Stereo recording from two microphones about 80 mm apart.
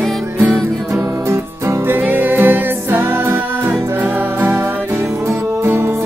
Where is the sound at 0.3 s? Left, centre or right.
Right.